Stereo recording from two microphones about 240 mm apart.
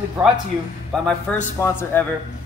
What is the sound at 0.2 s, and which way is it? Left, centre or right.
A man's voice, centre.